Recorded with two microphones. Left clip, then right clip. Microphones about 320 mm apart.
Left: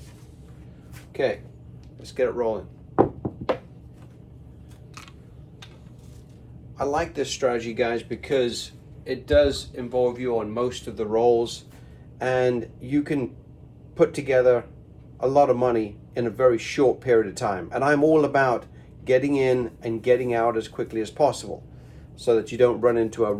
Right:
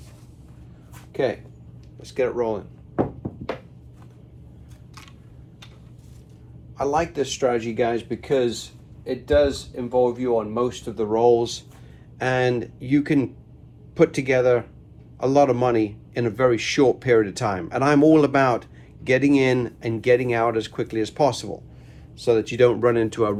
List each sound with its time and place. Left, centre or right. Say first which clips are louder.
2.0 s speech: right 1 dB; right
6.7 s speech: right 3 dB; right